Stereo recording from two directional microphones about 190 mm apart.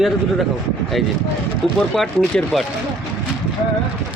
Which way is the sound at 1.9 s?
5° left (ahead or behind).